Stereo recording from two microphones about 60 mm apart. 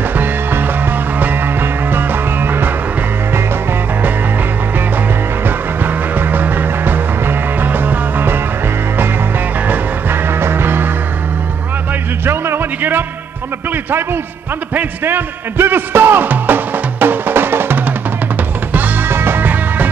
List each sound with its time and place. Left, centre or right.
0.2 s music: right
5.9 s music: right
9.7 s music: right
12.3 s music: right
14.7 s music: right